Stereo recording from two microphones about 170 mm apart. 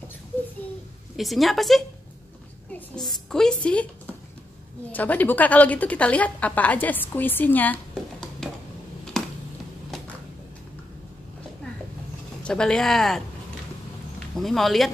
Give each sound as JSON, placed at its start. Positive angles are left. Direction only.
{"t": 1.1, "sound": "a woman's voice", "side_deg": 0}
{"t": 4.9, "sound": "a woman's voice", "side_deg": 10}
{"t": 8.4, "sound": "a sound", "side_deg": 5}
{"t": 9.1, "sound": "finger snapping", "side_deg": 5}
{"t": 12.4, "sound": "a woman's voice", "side_deg": 5}
{"t": 14.3, "sound": "a woman's voice", "side_deg": 0}